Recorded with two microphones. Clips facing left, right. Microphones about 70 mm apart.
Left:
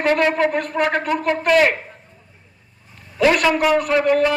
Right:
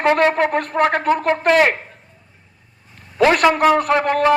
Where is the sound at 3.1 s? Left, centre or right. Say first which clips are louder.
Right 2 dB; right.